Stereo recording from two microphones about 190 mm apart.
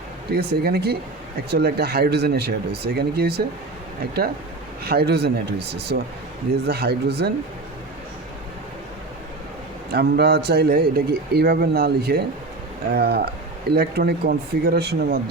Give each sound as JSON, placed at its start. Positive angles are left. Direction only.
{"t": 0.3, "sound": "a man's voice", "side_deg": -55}
{"t": 4.9, "sound": "a man's voice", "side_deg": -55}
{"t": 9.9, "sound": "a man's voice", "side_deg": -55}